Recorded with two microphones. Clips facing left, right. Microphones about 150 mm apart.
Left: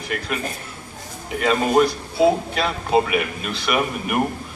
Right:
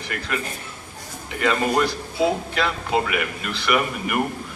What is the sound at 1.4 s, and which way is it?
Speech, 20° left (ahead or behind).